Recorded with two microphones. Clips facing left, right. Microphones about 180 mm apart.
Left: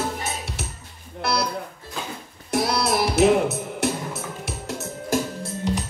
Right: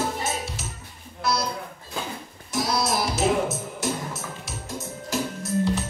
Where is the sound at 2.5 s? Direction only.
60° left (ahead or behind).